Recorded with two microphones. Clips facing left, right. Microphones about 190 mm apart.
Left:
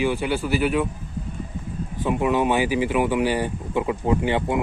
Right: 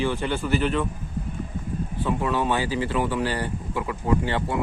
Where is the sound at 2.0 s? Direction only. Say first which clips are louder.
Left 4 dB; 15° left (ahead or behind).